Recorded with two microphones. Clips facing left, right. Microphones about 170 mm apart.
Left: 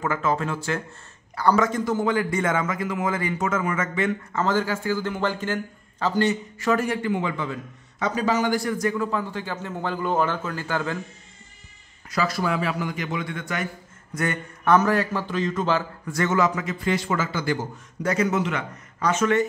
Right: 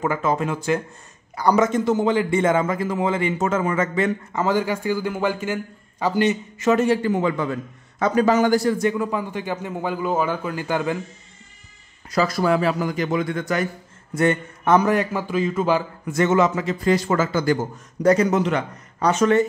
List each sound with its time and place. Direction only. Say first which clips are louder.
0.0 s a man's voice: right 3 dB; 15° right (ahead or behind); by 4.1 s 35° right (ahead or behind)
4.3 s a man's voice: right 2 dB; 15° right (ahead or behind)
7.0 s a man's voice: right 4 dB; 40° right (ahead or behind)
8.7 s a man's voice: right 3 dB; 20° right (ahead or behind)
12.1 s a man's voice: right 5 dB; 40° right (ahead or behind)
14.1 s a man's voice: right 7 dB; 25° right (ahead or behind); by 15.8 s 10° right (ahead or behind)
16.1 s a man's voice: right 4 dB; 20° right (ahead or behind)